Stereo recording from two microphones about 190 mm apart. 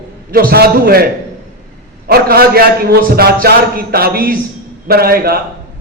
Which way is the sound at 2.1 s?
55° right (ahead or behind).